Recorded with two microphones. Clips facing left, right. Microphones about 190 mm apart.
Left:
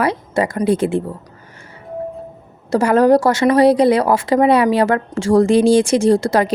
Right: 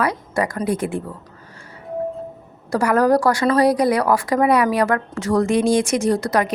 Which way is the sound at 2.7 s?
25° left (ahead or behind).